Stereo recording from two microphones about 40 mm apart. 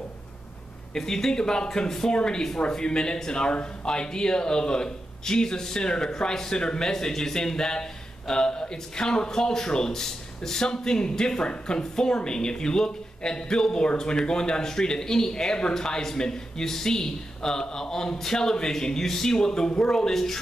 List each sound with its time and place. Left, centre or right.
0.9 s a man's voice: centre